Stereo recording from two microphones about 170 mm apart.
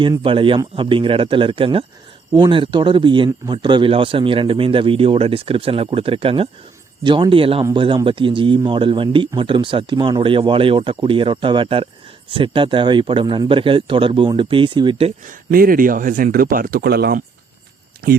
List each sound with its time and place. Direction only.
0.0 s speech: 30° right (ahead or behind)
15.2 s speech: 50° right (ahead or behind); by 17.2 s 70° right (ahead or behind)